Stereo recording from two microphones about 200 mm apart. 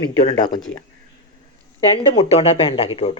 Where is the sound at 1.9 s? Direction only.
25° left (ahead or behind).